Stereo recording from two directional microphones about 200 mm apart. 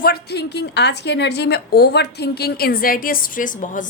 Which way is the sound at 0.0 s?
55° left (ahead or behind).